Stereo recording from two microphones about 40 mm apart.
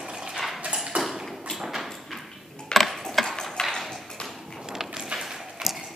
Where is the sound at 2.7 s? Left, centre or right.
Centre.